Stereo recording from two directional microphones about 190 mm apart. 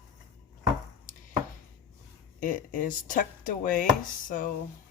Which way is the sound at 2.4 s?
45° left (ahead or behind).